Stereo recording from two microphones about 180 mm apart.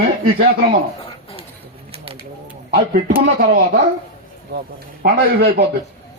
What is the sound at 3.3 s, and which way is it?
Speech, 55° right (ahead or behind).